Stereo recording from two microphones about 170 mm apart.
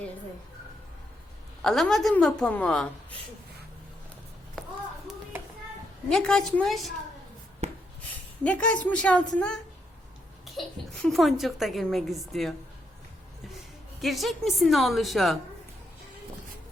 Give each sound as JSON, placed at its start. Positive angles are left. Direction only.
{"t": 1.6, "sound": "speech", "side_deg": 0}
{"t": 6.1, "sound": "speech", "side_deg": 5}
{"t": 7.6, "sound": "a sound", "side_deg": -40}
{"t": 8.4, "sound": "a woman's voice", "side_deg": 5}
{"t": 14.0, "sound": "speech", "side_deg": 0}